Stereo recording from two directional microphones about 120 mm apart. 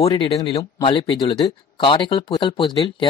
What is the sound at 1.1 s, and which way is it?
Speech, 35° left (ahead or behind).